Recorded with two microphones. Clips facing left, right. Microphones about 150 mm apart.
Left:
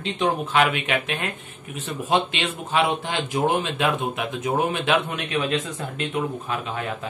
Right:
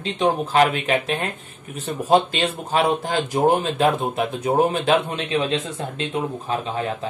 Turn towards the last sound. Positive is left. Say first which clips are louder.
# right 4 dB
turn(degrees=-30)  # may be behind; listen again after turning